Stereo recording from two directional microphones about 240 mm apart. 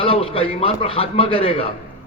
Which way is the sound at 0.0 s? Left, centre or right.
Left.